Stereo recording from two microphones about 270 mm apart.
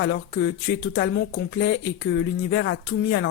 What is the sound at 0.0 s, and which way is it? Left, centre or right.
A woman's voice, left.